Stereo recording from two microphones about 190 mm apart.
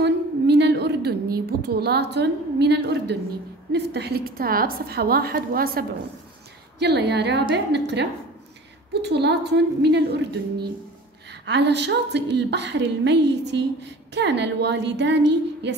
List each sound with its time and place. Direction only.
0.0 s a sound: 65° right (ahead or behind)
3.7 s a woman's voice: 60° right (ahead or behind)
6.8 s speech: 65° right (ahead or behind)